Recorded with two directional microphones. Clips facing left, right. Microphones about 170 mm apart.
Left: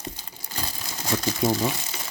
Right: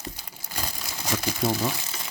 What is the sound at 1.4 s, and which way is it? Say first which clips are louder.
Speech: left 2 dB; centre (ahead or behind).